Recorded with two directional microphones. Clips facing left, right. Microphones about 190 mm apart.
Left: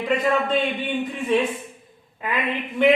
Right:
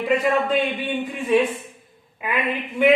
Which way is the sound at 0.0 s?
10° right (ahead or behind).